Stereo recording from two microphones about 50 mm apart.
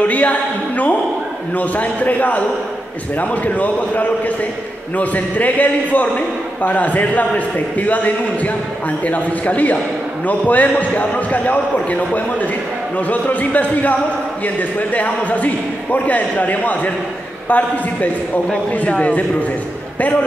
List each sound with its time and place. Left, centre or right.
0.0 s a man's voice: left